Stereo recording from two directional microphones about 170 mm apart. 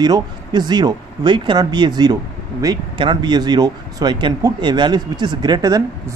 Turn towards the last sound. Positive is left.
turn(degrees=-25)  # may be behind; listen again after turning